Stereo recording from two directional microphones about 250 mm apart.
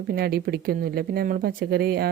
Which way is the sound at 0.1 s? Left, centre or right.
Right.